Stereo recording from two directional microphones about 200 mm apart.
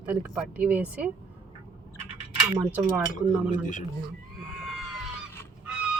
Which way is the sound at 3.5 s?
40° left (ahead or behind).